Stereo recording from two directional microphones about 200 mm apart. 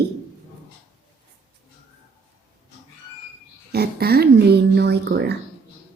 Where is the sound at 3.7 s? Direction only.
50° right (ahead or behind).